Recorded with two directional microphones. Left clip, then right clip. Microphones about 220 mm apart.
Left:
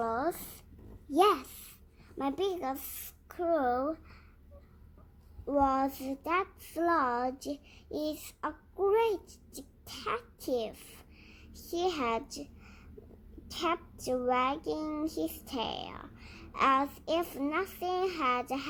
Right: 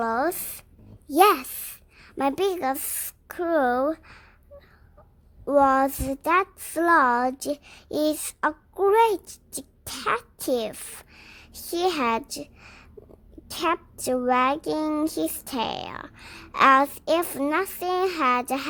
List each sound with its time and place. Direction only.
0.0 s a sound: 50° right (ahead or behind)
1.1 s child singing: 50° right (ahead or behind)
2.0 s speech: 50° right (ahead or behind)
5.5 s speech: 50° right (ahead or behind)
13.5 s child singing: 45° right (ahead or behind)